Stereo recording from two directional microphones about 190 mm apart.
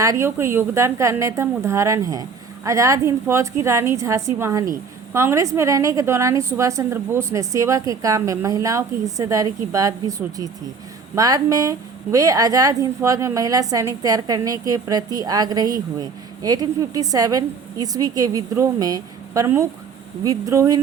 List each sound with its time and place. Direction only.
0.0 s a woman's voice: 15° right (ahead or behind)